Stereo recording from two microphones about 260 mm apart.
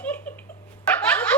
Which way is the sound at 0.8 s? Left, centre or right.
Centre.